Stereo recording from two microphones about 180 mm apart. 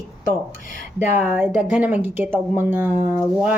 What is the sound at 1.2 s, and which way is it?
Speech, 10° right (ahead or behind).